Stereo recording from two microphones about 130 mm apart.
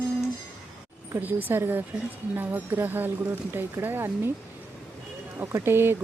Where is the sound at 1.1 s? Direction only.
15° right (ahead or behind).